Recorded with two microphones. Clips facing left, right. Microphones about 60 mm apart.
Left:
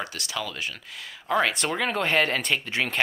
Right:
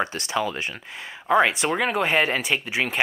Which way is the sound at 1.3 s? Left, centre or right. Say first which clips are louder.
Right 5 dB; centre.